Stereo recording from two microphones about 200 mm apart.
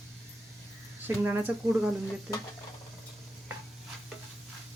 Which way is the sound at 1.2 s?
10° right (ahead or behind).